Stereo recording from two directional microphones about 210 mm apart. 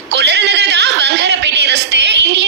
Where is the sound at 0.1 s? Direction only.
55° right (ahead or behind).